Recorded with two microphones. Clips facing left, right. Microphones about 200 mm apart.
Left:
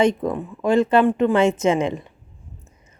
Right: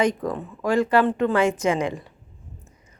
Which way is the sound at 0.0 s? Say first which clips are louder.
Left 4 dB; 25° left (ahead or behind).